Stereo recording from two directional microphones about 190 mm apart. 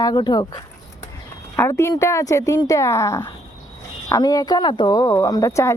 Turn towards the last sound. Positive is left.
turn(degrees=15)  # may be behind; listen again after turning